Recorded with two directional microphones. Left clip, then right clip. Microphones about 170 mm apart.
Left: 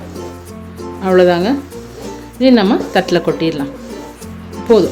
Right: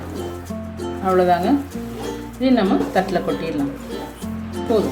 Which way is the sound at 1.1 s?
60° left (ahead or behind).